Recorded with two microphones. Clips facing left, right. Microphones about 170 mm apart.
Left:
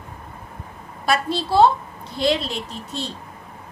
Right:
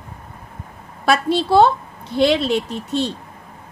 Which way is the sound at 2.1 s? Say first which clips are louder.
Right 6 dB; 65° right (ahead or behind).